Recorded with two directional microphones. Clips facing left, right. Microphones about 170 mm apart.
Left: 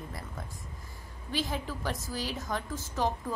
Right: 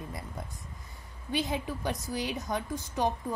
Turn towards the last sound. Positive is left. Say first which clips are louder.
# right 1 dB
turn(degrees=-15)  # may be behind; listen again after turning